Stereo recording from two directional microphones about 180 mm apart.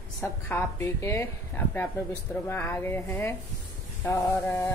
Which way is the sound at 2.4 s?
10° left (ahead or behind).